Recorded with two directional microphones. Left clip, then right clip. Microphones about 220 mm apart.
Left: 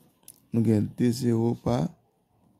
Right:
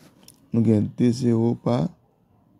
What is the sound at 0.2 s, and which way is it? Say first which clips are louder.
Speech: right 4 dB; 15° left (ahead or behind).